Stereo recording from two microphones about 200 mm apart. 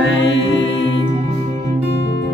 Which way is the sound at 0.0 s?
70° left (ahead or behind).